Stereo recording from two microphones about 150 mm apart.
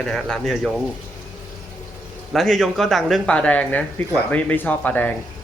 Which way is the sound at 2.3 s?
Centre (ahead or behind).